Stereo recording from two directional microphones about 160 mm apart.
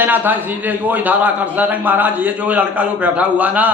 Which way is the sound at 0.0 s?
10° right (ahead or behind).